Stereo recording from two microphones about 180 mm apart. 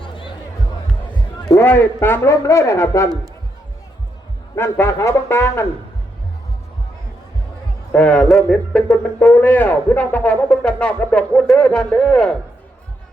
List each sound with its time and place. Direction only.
0.0 s music: 30° left (ahead or behind)
1.1 s a man's voice: 15° left (ahead or behind)
4.5 s speech: 15° left (ahead or behind)
7.9 s a man's voice: 5° left (ahead or behind)